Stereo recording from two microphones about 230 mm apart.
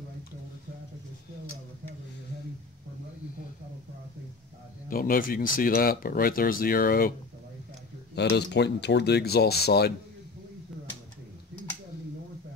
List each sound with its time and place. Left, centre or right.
4.8 s speech: left